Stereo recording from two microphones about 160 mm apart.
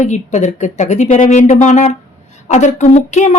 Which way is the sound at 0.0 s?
45° left (ahead or behind).